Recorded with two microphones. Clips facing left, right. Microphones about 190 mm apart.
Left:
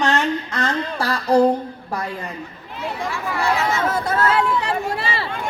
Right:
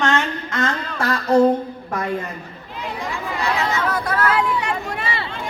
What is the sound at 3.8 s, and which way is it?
Chatter, 25° left (ahead or behind).